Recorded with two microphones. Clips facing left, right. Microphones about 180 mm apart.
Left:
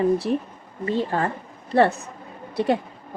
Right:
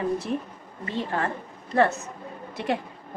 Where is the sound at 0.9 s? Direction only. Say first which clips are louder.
Left 4 dB; 30° left (ahead or behind).